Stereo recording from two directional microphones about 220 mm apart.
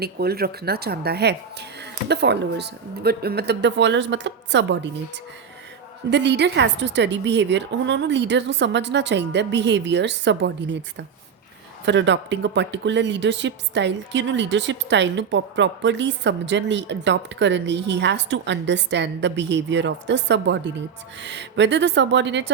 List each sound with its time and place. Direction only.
0.0 s speech: 45° right (ahead or behind)
6.1 s speech: 50° right (ahead or behind)
11.9 s speech: 55° right (ahead or behind)